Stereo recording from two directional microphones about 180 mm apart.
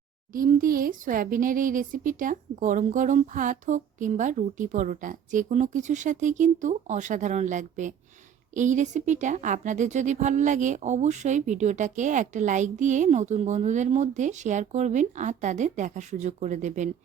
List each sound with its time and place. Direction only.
0.3 s a woman's voice: 50° right (ahead or behind)